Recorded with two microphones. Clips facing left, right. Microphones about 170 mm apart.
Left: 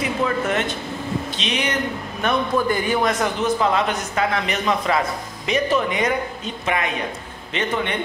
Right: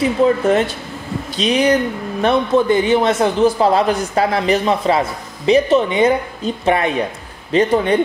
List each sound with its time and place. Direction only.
0.0 s a man's voice: 30° right (ahead or behind)
2.2 s a man's voice: 20° right (ahead or behind)